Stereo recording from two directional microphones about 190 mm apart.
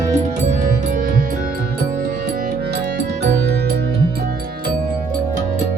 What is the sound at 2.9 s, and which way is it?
Music, 60° right (ahead or behind).